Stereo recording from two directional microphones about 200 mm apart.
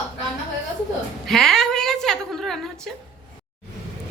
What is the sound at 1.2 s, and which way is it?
Speech, centre (ahead or behind).